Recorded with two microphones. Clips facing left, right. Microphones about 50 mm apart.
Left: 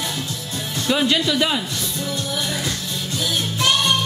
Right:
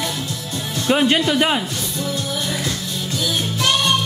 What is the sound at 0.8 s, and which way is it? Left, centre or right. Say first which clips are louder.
Speech: right 3 dB; right.